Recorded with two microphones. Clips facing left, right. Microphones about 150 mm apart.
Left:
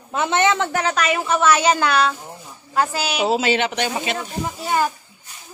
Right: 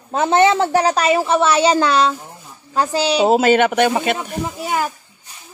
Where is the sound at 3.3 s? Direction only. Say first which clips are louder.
Right 6 dB; 50° right (ahead or behind).